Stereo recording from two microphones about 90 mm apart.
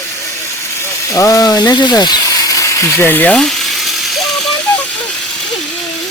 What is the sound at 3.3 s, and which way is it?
Electric toothbrush, 5° left (ahead or behind).